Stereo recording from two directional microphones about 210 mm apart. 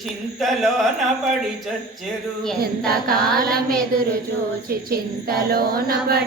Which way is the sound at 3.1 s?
45° right (ahead or behind).